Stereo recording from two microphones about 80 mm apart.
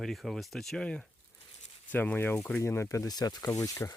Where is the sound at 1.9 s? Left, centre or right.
Left.